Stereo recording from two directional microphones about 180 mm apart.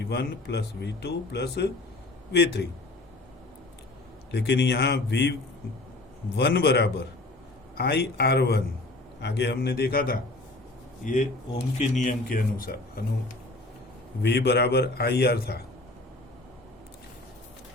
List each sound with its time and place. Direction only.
0.0 s a man's voice: 70° left (ahead or behind)
4.3 s a man's voice: 65° left (ahead or behind)
6.3 s a man's voice: 65° left (ahead or behind)
11.0 s speech: 45° left (ahead or behind)
14.2 s a man's voice: 65° left (ahead or behind)